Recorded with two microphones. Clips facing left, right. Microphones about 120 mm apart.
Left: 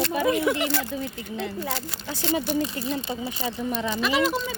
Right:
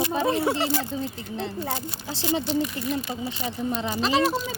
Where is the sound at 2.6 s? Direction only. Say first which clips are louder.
Even; 30° left (ahead or behind).